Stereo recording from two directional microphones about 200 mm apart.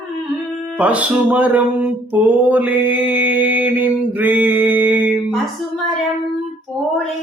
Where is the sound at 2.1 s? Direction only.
10° right (ahead or behind).